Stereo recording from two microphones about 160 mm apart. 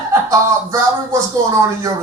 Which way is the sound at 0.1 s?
20° right (ahead or behind).